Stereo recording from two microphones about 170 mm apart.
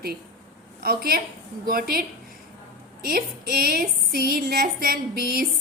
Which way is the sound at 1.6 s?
60° right (ahead or behind).